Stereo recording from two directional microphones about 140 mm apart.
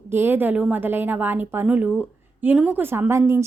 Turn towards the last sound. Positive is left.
turn(degrees=-20)  # may be behind; listen again after turning